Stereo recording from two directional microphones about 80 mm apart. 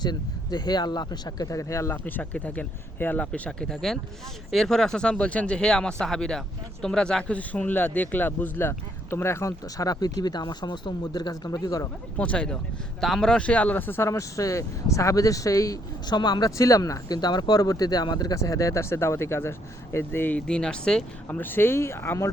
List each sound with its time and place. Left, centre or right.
0.0 s speech: left
1.5 s speech: left
2.0 s speech: centre
3.7 s speech: centre; by 11.9 s left
12.1 s speech: centre
13.0 s speech: centre; by 14.1 s left
14.1 s speech: left
16.0 s speech: left
16.6 s speech: left
20.5 s speech: centre
21.2 s speech: left